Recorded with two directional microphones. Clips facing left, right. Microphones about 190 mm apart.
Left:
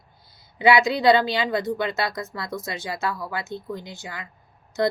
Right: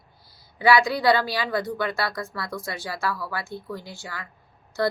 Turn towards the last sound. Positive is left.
turn(degrees=20)  # may be behind; listen again after turning